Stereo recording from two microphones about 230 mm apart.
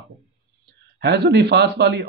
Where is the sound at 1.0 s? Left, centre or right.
Right.